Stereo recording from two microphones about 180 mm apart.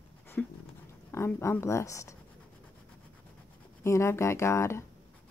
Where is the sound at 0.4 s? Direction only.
5° left (ahead or behind).